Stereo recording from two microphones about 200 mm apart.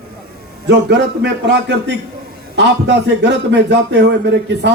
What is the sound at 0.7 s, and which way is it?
A man's voice, 60° right (ahead or behind).